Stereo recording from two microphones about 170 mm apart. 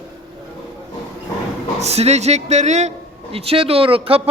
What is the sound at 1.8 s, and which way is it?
A man's voice, 40° right (ahead or behind).